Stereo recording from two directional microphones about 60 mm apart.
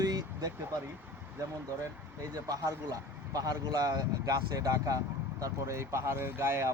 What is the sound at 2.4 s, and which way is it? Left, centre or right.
Speech, right.